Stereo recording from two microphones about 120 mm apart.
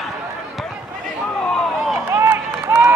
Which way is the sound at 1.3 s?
5° left (ahead or behind).